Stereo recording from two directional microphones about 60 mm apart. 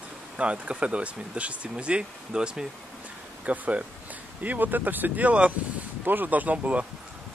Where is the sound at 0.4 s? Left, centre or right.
Centre.